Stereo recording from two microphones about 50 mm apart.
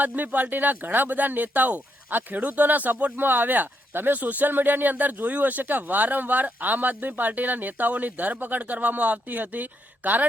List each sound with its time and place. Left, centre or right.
0.0 s speech: right